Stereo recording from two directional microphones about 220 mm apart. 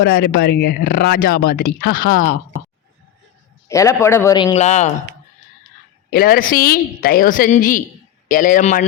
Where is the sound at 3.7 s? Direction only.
15° left (ahead or behind).